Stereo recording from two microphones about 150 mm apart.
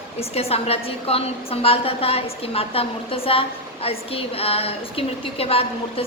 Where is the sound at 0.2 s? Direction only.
40° left (ahead or behind).